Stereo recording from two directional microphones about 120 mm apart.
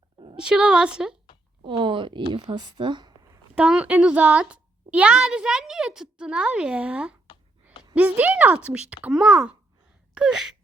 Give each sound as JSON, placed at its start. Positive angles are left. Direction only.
{"t": 0.3, "sound": "a woman's voice", "side_deg": -5}
{"t": 1.6, "sound": "speech", "side_deg": -45}
{"t": 3.5, "sound": "a woman's voice", "side_deg": -10}